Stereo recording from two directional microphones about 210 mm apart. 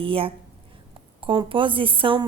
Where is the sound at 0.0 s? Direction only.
25° right (ahead or behind).